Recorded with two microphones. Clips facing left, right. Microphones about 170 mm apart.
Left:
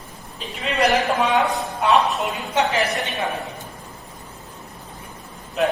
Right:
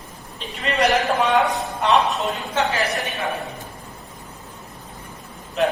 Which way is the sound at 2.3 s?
20° left (ahead or behind).